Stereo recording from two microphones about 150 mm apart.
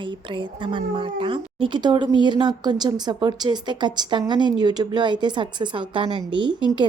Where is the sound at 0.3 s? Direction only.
35° right (ahead or behind).